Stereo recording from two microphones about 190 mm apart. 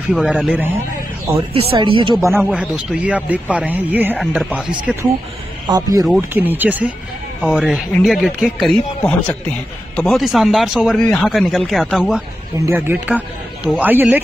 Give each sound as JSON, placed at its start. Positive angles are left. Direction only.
{"t": 0.1, "sound": "speech", "side_deg": 0}
{"t": 1.5, "sound": "speech", "side_deg": -30}
{"t": 2.5, "sound": "speech", "side_deg": -5}
{"t": 5.7, "sound": "speech", "side_deg": -20}
{"t": 12.6, "sound": "speech", "side_deg": -10}